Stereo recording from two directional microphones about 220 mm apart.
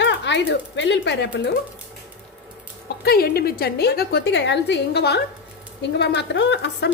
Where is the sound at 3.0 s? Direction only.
45° left (ahead or behind).